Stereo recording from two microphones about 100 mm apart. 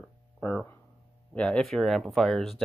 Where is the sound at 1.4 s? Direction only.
10° left (ahead or behind).